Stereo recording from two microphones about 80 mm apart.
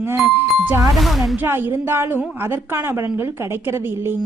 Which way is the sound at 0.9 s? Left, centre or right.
Centre.